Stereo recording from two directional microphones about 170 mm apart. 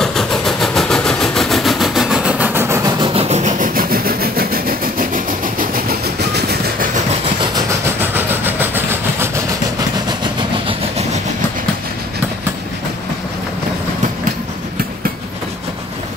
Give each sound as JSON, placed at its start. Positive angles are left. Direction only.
{"t": 0.0, "sound": "vehicle", "side_deg": 0}
{"t": 3.0, "sound": "vehicle", "side_deg": -35}
{"t": 8.0, "sound": "train", "side_deg": -10}